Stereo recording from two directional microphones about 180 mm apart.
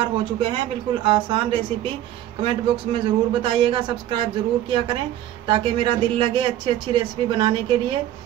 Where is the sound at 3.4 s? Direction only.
25° right (ahead or behind).